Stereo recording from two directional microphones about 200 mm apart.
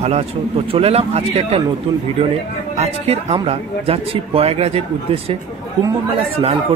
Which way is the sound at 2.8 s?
30° right (ahead or behind).